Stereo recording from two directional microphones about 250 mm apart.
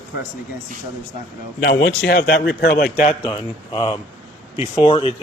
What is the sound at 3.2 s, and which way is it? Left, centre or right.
Speech, centre.